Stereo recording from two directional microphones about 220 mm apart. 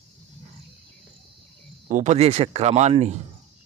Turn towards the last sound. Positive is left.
turn(degrees=-30)  # may be behind; listen again after turning